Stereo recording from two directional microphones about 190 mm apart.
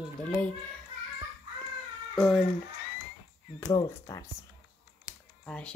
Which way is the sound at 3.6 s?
20° left (ahead or behind).